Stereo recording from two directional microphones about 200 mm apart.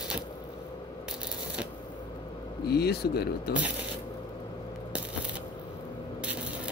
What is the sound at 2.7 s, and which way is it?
Speech, 55° left (ahead or behind).